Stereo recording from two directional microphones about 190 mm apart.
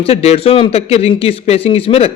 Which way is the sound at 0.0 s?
30° left (ahead or behind).